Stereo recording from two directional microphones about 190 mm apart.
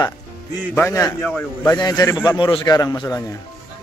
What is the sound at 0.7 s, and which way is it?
A man's voice, 15° left (ahead or behind).